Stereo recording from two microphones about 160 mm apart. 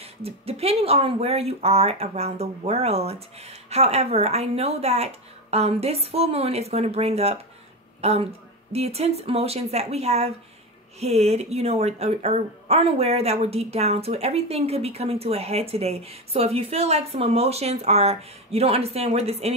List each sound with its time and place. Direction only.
0.0 s speech: 40° right (ahead or behind)